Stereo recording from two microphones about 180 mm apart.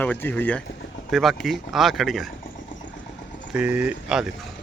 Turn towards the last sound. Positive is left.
turn(degrees=-5)  # may be behind; listen again after turning